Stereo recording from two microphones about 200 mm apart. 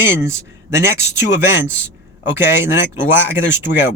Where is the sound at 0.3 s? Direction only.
15° right (ahead or behind).